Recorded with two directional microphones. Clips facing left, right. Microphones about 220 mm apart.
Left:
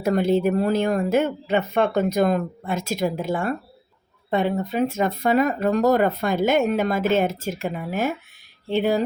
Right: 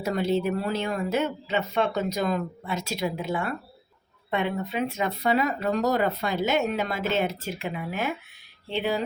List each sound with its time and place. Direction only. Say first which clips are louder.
0.0 s speech: left 5 dB; 50° left (ahead or behind)